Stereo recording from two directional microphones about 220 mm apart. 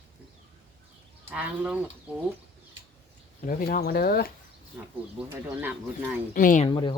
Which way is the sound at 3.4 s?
40° left (ahead or behind).